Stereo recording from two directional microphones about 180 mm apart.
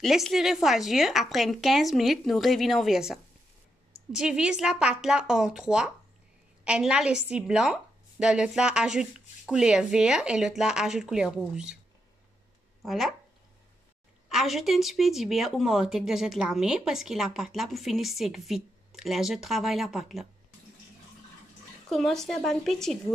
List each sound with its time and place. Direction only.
0.0 s speech: centre (ahead or behind)
12.8 s speech: centre (ahead or behind)
14.3 s speech: centre (ahead or behind)
21.8 s speech: centre (ahead or behind)